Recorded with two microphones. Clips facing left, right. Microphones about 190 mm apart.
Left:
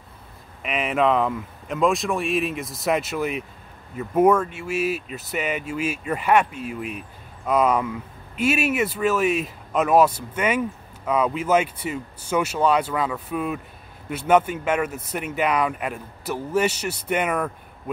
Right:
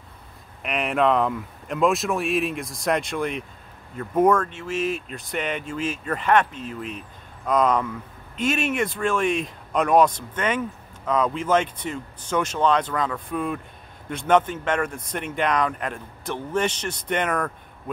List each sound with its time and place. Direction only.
0.6 s speech: centre (ahead or behind)